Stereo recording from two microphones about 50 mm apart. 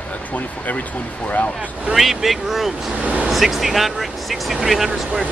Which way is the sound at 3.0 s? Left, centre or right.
Right.